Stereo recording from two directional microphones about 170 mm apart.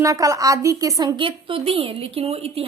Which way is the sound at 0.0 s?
20° right (ahead or behind).